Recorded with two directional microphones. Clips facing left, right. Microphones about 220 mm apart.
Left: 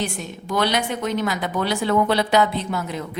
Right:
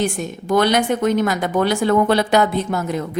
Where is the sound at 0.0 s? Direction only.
50° right (ahead or behind).